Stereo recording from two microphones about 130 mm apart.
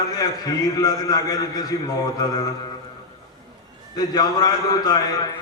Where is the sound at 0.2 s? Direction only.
25° left (ahead or behind).